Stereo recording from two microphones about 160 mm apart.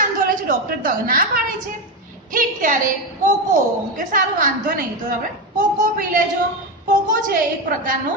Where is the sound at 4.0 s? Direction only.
55° right (ahead or behind).